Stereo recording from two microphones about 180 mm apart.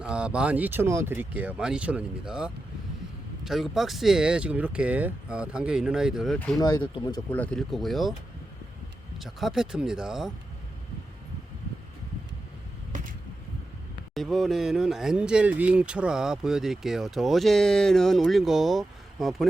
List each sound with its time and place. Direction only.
0.0 s speech: 5° right (ahead or behind)
6.6 s speech: 20° left (ahead or behind)
7.3 s speech: 10° left (ahead or behind)
9.2 s speech: centre (ahead or behind)
14.1 s speech: centre (ahead or behind)